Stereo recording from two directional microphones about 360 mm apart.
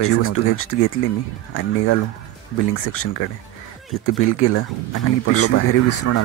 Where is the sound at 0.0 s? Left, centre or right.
Left.